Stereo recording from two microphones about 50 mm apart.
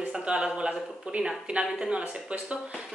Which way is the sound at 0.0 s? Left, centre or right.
Right.